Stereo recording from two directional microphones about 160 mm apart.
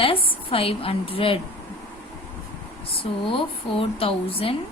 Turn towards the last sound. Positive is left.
turn(degrees=35)  # may be behind; listen again after turning